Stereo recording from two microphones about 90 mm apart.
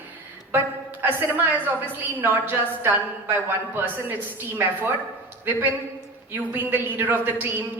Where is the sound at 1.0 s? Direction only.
25° right (ahead or behind).